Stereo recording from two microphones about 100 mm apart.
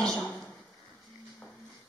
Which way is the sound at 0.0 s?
5° left (ahead or behind).